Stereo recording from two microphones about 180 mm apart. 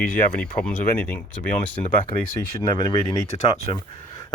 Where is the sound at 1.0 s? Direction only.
10° left (ahead or behind).